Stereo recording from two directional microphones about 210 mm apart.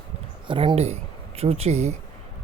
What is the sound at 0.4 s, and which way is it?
Speech, 25° right (ahead or behind).